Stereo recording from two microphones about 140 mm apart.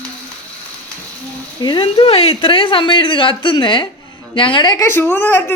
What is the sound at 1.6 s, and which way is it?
A woman's voice, 35° left (ahead or behind).